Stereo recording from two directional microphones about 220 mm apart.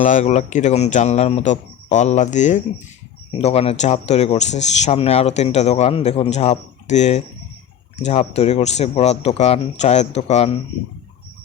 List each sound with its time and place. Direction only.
0.0 s speech: 35° left (ahead or behind)